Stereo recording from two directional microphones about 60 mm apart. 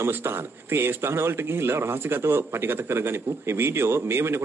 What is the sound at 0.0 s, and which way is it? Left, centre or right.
Speech, right.